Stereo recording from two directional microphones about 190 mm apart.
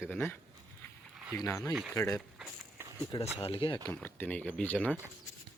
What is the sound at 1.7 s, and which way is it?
Speech, centre (ahead or behind).